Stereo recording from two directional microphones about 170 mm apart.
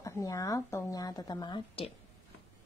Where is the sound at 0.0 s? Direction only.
20° left (ahead or behind).